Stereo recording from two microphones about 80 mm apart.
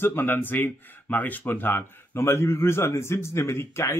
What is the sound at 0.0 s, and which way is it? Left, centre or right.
Speech, left.